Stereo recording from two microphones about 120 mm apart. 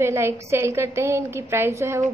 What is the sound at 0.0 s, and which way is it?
A woman's voice, 20° right (ahead or behind).